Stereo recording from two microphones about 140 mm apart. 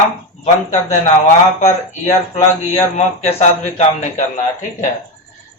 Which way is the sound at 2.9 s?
50° left (ahead or behind).